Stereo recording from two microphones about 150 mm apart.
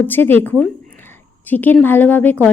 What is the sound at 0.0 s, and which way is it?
Speech, 15° left (ahead or behind).